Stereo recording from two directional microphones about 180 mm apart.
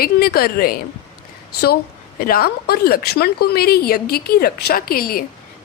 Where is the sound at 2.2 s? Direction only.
55° left (ahead or behind).